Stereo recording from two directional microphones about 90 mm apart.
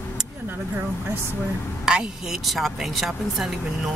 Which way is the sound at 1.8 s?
5° right (ahead or behind).